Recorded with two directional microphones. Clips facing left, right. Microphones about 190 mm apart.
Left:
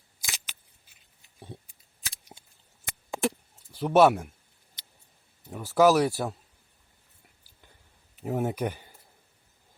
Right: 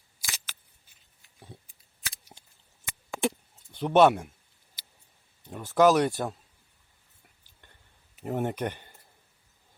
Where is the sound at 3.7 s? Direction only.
5° left (ahead or behind).